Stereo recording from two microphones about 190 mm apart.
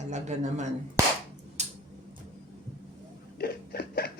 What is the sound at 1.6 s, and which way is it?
Tick-tock, 35° right (ahead or behind).